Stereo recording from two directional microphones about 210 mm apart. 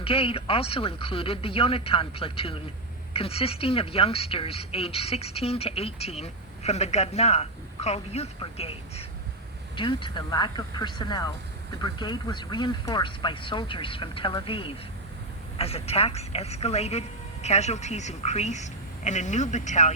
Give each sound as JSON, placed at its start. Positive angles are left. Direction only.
{"t": 0.0, "sound": "a woman's voice", "side_deg": 25}